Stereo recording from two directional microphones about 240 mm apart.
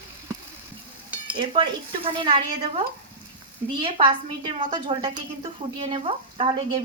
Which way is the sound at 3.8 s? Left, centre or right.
Right.